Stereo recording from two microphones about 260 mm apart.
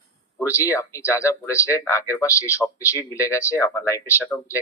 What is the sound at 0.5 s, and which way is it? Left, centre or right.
Speech, centre.